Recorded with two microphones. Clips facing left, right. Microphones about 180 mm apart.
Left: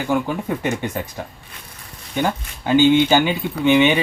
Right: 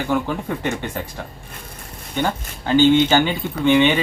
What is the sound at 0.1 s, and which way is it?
Speech, 10° left (ahead or behind).